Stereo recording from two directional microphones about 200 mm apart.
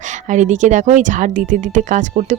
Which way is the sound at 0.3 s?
35° right (ahead or behind).